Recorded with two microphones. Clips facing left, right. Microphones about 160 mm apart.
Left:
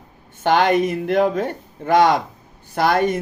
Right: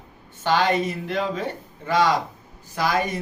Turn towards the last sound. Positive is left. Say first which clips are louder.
# left 6 dB
turn(degrees=60)  # may be behind; listen again after turning